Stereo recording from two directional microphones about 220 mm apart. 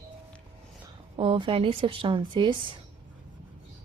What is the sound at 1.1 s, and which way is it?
Speech, 25° right (ahead or behind).